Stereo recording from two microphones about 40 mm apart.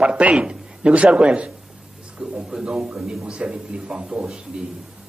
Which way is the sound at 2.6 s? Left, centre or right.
Centre.